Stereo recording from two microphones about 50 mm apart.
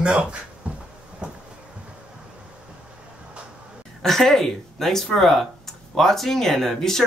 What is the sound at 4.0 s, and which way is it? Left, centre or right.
Speech, centre.